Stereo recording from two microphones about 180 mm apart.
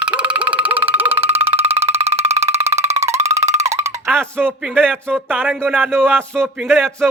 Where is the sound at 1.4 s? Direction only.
35° right (ahead or behind).